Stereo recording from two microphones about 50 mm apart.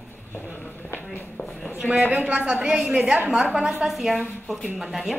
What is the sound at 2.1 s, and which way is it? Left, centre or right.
A woman's voice, right.